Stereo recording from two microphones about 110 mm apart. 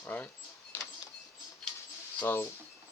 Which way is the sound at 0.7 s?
20° left (ahead or behind).